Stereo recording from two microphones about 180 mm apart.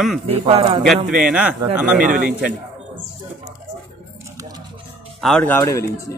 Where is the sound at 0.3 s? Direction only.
35° right (ahead or behind).